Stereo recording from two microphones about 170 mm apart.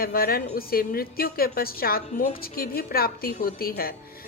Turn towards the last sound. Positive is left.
turn(degrees=60)  # may be behind; listen again after turning